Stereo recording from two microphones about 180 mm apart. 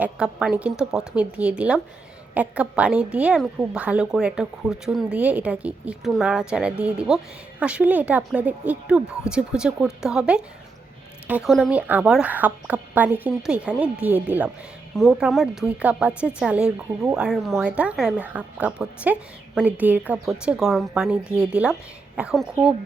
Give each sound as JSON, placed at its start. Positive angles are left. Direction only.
{"t": 0.0, "sound": "a woman's voice", "side_deg": -5}